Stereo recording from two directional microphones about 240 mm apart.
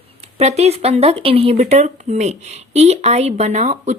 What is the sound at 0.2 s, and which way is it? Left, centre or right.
A woman's voice, right.